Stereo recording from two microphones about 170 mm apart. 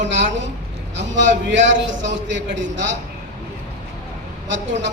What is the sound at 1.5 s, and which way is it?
A man's voice, 90° right.